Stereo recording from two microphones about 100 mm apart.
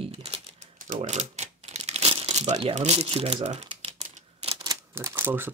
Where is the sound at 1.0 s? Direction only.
90° right.